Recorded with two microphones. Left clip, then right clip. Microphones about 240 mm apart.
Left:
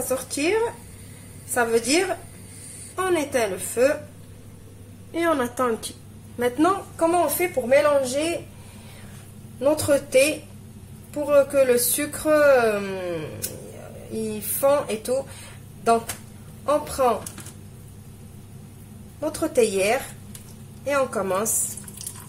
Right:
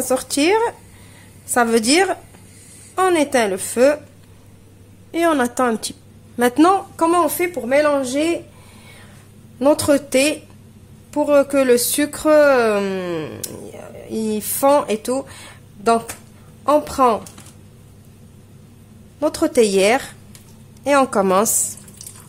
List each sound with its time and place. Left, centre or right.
0.1 s a woman's voice: right
5.1 s speech: right
9.6 s speech: right
16.6 s speech: right
19.1 s a woman's voice: right